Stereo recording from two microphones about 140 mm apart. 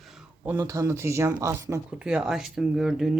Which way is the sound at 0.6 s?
20° right (ahead or behind).